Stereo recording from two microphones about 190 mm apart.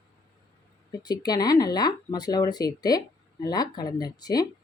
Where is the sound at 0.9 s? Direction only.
20° left (ahead or behind).